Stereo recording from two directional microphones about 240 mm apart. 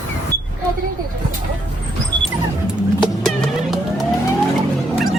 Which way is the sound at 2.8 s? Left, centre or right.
Centre.